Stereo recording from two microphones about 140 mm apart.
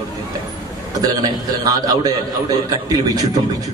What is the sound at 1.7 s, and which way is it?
A man's voice, 25° right (ahead or behind).